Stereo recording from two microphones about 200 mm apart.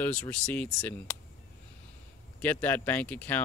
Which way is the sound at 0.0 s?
5° left (ahead or behind).